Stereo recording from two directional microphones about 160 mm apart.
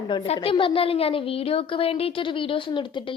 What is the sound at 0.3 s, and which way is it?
A woman's voice, 35° left (ahead or behind).